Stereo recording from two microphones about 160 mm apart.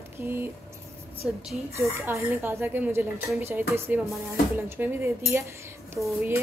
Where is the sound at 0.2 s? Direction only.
15° right (ahead or behind).